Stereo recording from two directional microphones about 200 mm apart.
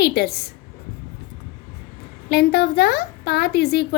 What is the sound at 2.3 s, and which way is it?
A woman's voice, 55° left (ahead or behind).